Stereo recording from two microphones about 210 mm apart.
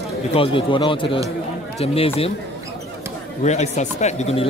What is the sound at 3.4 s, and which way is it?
Speech, 35° left (ahead or behind).